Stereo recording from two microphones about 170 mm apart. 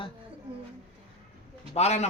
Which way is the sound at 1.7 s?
40° left (ahead or behind).